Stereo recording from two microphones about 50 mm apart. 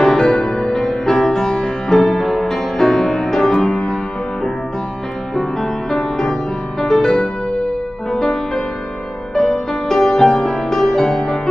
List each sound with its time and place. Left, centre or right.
0.0 s music: centre
5.3 s music: centre